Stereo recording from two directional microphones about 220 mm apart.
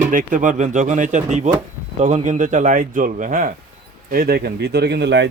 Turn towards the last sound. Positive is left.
turn(degrees=-50)  # may be behind; listen again after turning